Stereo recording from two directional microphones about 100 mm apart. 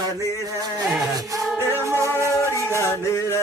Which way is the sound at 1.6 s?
30° left (ahead or behind).